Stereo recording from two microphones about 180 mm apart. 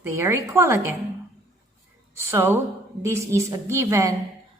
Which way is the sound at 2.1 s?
15° right (ahead or behind).